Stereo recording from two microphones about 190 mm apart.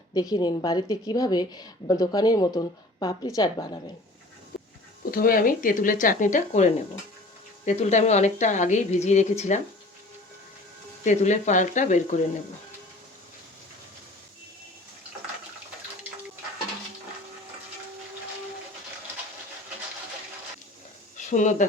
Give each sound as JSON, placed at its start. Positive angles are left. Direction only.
{"t": 0.1, "sound": "a woman's voice", "side_deg": 20}
{"t": 5.1, "sound": "a woman's voice", "side_deg": 50}
{"t": 11.0, "sound": "a woman's voice", "side_deg": 40}
{"t": 21.2, "sound": "speech", "side_deg": 40}